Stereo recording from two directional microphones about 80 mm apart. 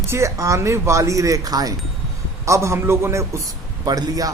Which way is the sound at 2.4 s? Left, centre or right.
Right.